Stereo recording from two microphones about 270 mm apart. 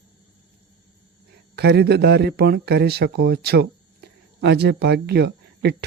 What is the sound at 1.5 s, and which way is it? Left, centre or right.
Speech, right.